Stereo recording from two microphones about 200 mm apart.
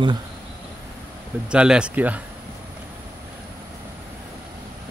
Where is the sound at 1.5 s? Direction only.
5° right (ahead or behind).